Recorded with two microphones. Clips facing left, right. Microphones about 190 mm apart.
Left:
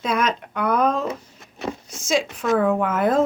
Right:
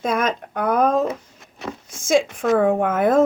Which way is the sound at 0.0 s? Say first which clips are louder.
Right 1 dB; 50° right (ahead or behind).